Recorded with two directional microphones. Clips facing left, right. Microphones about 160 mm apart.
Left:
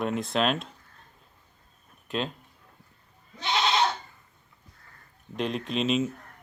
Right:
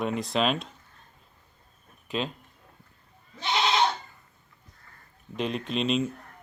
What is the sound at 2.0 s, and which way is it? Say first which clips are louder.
Speech: even; centre (ahead or behind).